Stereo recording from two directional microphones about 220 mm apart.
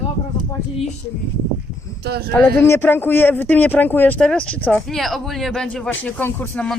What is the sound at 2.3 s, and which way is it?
Speech, 10° left (ahead or behind).